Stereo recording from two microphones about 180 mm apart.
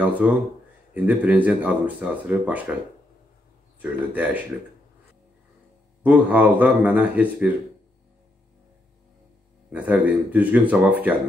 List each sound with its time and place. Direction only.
0.0 s speech: 10° right (ahead or behind)
3.8 s speech: 10° right (ahead or behind)
6.0 s speech: 10° right (ahead or behind)
9.7 s speech: 5° right (ahead or behind)